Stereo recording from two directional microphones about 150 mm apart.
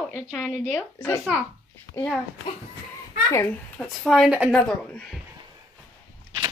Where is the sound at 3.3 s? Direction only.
10° left (ahead or behind).